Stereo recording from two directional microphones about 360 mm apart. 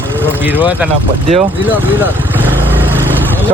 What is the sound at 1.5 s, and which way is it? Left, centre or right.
Vehicle, centre.